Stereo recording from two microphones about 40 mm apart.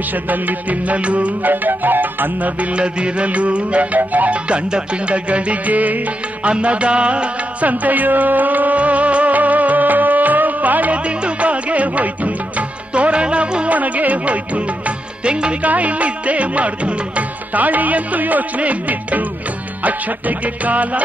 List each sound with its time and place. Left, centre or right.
0.1 s music: right
1.5 s music: right
2.6 s music: right
4.5 s music: right
6.4 s music: right
7.6 s music: right
11.1 s music: right
13.7 s music: right
15.6 s music: right